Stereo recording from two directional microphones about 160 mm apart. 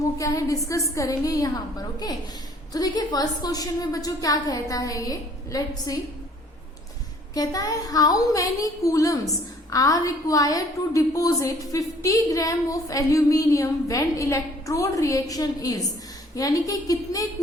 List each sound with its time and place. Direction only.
0.2 s a woman's voice: 20° left (ahead or behind)
7.3 s a woman's voice: 25° left (ahead or behind)